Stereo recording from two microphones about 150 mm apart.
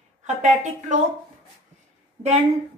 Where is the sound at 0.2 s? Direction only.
50° right (ahead or behind).